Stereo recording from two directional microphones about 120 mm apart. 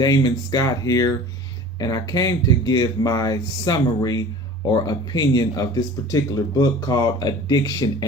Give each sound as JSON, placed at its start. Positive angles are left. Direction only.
{"t": 0.0, "sound": "speech", "side_deg": 35}